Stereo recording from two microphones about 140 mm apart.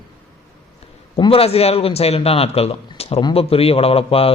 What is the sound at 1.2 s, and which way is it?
A man's voice, 45° left (ahead or behind).